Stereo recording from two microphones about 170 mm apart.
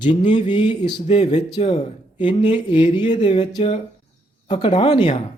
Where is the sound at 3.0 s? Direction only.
40° left (ahead or behind).